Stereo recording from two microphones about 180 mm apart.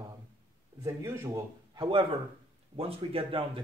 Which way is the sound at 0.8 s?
15° right (ahead or behind).